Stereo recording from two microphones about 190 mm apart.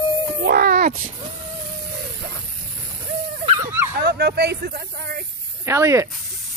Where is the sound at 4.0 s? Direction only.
60° right (ahead or behind).